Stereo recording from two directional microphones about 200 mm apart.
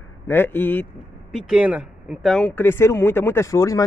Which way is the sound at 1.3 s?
5° right (ahead or behind).